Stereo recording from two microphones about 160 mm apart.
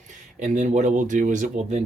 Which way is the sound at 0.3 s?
50° right (ahead or behind).